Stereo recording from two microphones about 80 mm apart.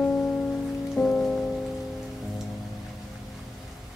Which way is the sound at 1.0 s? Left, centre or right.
Centre.